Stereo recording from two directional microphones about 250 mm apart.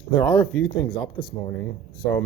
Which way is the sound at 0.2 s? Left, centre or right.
Centre.